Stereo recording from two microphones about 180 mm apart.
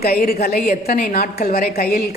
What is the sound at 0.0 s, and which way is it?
A woman's voice, 60° left (ahead or behind).